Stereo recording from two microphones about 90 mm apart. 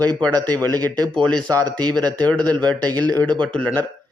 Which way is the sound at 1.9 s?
15° left (ahead or behind).